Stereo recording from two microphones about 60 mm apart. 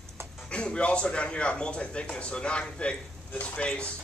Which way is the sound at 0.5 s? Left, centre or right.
Centre.